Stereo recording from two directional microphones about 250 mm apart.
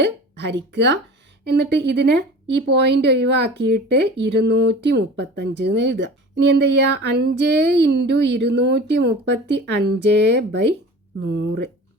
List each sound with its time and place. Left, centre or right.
0.0 s speech: right